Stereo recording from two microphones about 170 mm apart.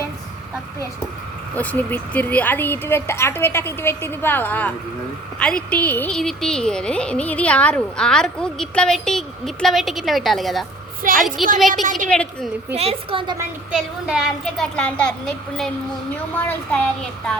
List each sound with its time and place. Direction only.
1.5 s a woman's voice: 10° left (ahead or behind)
11.0 s a woman's voice: 55° right (ahead or behind)
12.1 s a woman's voice: 5° left (ahead or behind)
12.7 s a woman's voice: 35° right (ahead or behind)
13.7 s a woman's voice: centre (ahead or behind)